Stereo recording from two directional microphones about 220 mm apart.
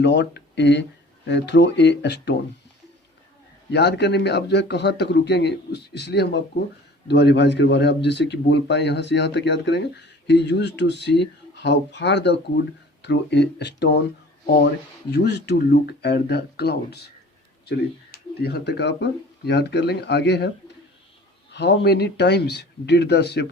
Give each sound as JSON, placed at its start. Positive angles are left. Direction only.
{"t": 0.0, "sound": "a man's voice", "side_deg": 50}
{"t": 3.7, "sound": "a man's voice", "side_deg": 50}
{"t": 21.5, "sound": "a man's voice", "side_deg": 50}